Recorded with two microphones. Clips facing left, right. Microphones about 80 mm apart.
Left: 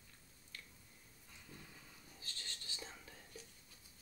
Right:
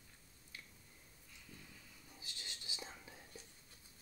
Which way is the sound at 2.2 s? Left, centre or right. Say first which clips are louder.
Left 1 dB; centre.